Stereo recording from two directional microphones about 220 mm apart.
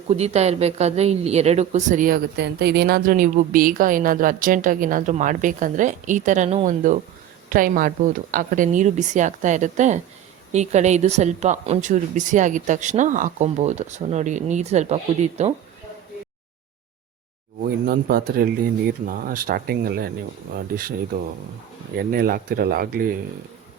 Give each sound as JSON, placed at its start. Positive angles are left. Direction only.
{"t": 0.1, "sound": "a woman's voice", "side_deg": -30}
{"t": 17.6, "sound": "a woman's voice", "side_deg": -40}
{"t": 21.9, "sound": "a woman's voice", "side_deg": -45}